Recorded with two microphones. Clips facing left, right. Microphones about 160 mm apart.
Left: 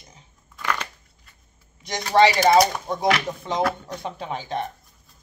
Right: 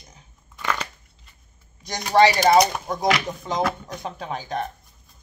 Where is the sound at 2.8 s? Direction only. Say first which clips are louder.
Even; 25° left (ahead or behind).